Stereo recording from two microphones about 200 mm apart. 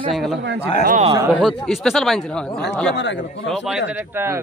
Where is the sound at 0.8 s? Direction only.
40° right (ahead or behind).